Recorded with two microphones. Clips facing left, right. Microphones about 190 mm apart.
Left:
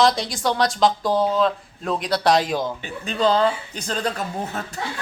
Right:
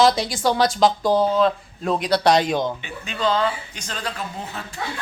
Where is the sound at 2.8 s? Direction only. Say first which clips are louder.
Left 4 dB; 40° left (ahead or behind).